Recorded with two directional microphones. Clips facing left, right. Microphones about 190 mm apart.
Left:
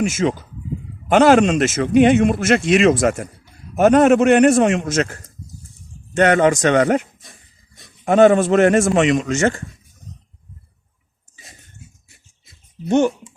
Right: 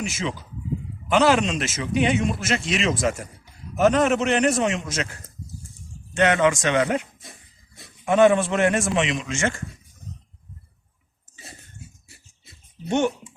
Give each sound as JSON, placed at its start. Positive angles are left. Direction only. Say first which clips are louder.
{"t": 0.0, "sound": "a man's voice", "louder": "left 10 dB", "side_deg": 50}
{"t": 8.0, "sound": "a man's voice", "louder": "left 5 dB", "side_deg": 40}